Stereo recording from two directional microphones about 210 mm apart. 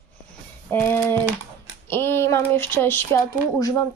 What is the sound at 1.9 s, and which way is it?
Speech, 10° left (ahead or behind).